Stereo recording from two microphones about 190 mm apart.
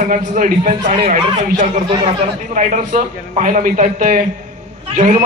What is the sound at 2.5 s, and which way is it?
A man's voice, 45° right (ahead or behind).